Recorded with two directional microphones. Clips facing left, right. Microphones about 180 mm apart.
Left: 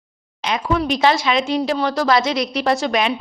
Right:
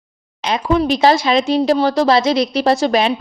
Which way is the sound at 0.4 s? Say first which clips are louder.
Right 4 dB; 35° right (ahead or behind).